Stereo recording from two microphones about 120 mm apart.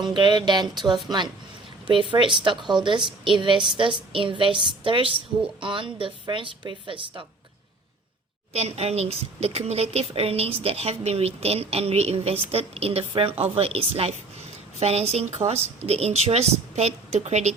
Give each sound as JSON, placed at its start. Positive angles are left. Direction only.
{"t": 0.0, "sound": "speech", "side_deg": -40}
{"t": 1.9, "sound": "a woman's voice", "side_deg": -45}
{"t": 8.5, "sound": "a woman's voice", "side_deg": -60}